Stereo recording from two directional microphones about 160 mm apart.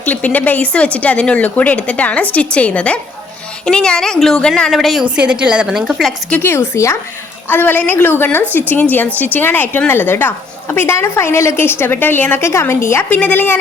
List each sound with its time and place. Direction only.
0.0 s a woman's voice: 10° left (ahead or behind)
6.4 s a woman's voice: 15° left (ahead or behind)